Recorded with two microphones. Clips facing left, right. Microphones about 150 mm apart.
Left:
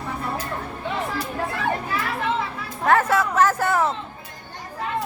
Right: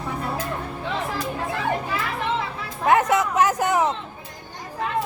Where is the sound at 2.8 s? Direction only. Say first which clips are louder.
Even; 15° right (ahead or behind).